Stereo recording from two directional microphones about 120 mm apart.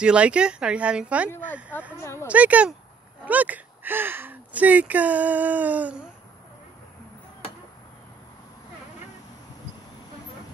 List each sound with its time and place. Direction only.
0.0 s speech: 10° right (ahead or behind)